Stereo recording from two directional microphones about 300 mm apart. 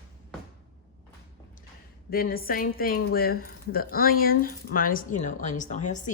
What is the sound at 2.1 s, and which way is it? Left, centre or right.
A woman's voice, left.